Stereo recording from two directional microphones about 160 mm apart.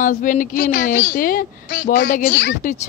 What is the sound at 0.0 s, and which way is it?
A woman's voice, 55° left (ahead or behind).